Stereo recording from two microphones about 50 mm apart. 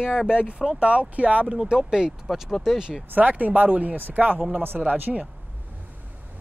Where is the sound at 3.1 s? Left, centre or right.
Right.